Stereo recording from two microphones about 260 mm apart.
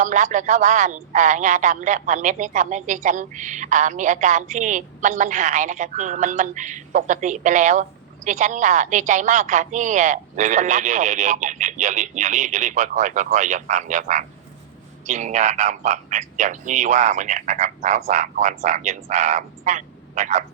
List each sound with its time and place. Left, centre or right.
0.0 s speech: right